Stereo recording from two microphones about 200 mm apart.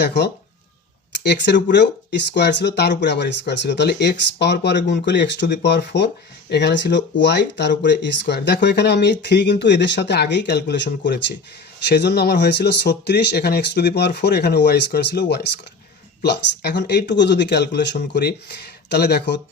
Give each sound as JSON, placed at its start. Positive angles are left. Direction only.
{"t": 0.0, "sound": "speech", "side_deg": 60}